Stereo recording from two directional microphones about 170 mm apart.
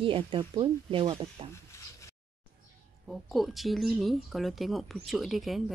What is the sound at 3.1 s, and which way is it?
Speech, centre (ahead or behind).